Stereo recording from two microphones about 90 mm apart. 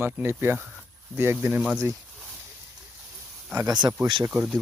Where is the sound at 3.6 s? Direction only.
45° right (ahead or behind).